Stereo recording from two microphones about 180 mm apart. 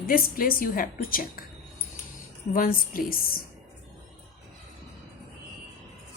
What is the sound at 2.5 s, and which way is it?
Speech, 50° left (ahead or behind).